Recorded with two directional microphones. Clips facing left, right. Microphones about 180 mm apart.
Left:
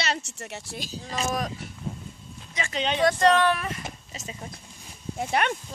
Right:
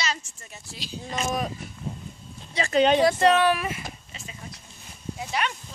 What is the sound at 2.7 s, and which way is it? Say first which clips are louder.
Speech: right 9 dB; 50° right (ahead or behind).